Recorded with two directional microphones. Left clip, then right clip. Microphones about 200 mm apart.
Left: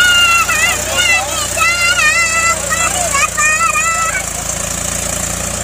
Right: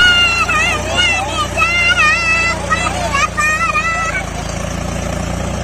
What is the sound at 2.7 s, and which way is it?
Vehicle, 20° left (ahead or behind).